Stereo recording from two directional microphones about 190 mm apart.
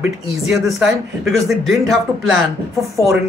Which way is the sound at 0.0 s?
5° right (ahead or behind).